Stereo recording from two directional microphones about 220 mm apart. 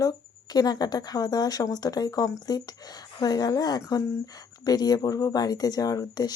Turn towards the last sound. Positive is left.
turn(degrees=15)  # may be behind; listen again after turning